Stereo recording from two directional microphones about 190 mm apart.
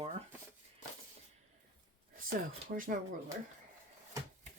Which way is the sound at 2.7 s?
45° right (ahead or behind).